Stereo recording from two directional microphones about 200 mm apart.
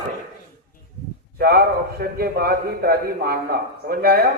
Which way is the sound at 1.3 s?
50° right (ahead or behind).